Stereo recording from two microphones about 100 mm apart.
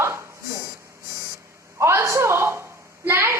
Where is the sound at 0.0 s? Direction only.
25° right (ahead or behind).